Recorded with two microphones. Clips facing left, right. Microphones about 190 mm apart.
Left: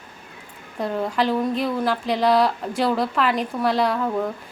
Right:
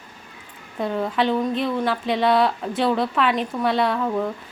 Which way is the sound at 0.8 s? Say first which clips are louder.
Even; centre (ahead or behind).